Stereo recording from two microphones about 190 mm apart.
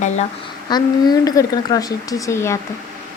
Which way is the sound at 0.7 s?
20° left (ahead or behind).